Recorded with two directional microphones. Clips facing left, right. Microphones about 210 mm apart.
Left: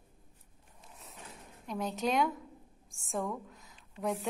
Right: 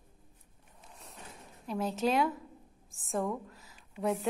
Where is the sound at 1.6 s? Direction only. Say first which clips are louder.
Right 3 dB; centre (ahead or behind).